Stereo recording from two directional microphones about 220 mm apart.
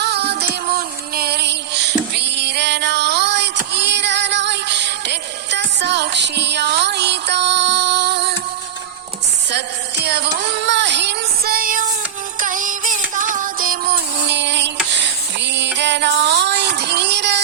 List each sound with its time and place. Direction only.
0.0 s music: 50° right (ahead or behind)
9.5 s child singing: 50° right (ahead or behind)
12.4 s music: 35° right (ahead or behind)
13.1 s a sound: 35° right (ahead or behind)